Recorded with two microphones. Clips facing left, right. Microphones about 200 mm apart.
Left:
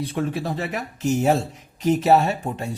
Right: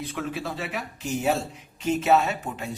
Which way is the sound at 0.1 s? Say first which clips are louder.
Left 6 dB; 35° left (ahead or behind).